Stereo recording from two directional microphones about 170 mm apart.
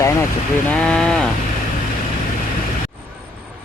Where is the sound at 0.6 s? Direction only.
5° left (ahead or behind).